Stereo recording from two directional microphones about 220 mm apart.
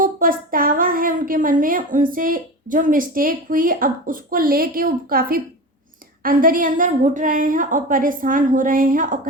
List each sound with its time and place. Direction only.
0.0 s a woman's voice: 40° right (ahead or behind)